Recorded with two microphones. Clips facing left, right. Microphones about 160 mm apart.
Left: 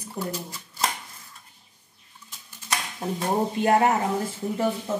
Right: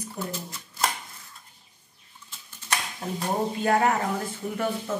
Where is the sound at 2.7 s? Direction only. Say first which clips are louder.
Left 2 dB; 20° left (ahead or behind).